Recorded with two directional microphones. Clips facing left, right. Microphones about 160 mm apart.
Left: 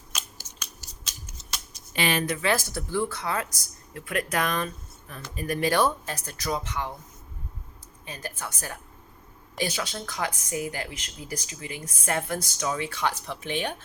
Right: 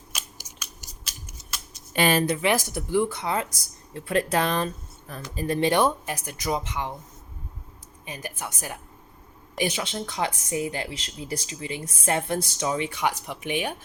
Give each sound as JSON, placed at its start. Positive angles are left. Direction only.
{"t": 0.1, "sound": "scissors", "side_deg": -5}
{"t": 1.9, "sound": "speech", "side_deg": -45}
{"t": 2.3, "sound": "speech", "side_deg": -20}
{"t": 8.0, "sound": "a woman's voice", "side_deg": -15}